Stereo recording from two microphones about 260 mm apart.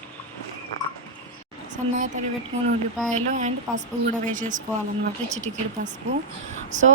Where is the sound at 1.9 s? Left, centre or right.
Right.